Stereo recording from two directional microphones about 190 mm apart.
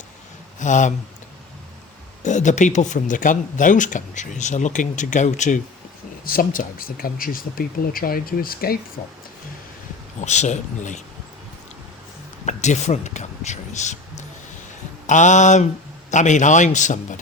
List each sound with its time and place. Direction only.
0.6 s speech: 40° left (ahead or behind)
2.2 s speech: 40° left (ahead or behind)
10.2 s speech: 40° left (ahead or behind)
12.5 s speech: 40° left (ahead or behind)